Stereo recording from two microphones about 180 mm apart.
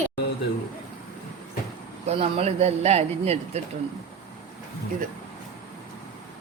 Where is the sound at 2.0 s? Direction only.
35° right (ahead or behind).